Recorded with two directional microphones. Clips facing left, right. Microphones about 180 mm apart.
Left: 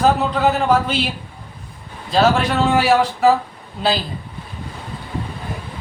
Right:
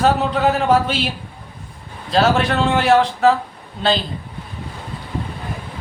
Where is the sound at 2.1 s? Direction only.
Centre (ahead or behind).